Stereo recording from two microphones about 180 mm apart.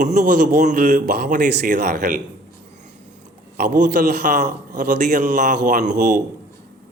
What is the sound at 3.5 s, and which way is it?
A man's voice, 50° right (ahead or behind).